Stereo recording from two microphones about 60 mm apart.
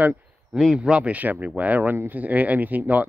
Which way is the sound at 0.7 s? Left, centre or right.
Centre.